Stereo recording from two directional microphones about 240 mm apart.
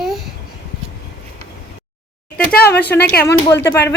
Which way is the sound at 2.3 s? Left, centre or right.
Left.